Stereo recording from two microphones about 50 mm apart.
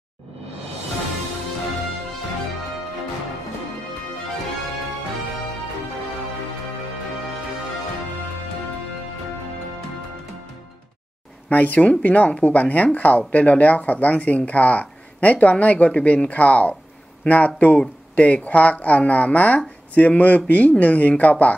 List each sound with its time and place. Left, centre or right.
11.5 s speech: left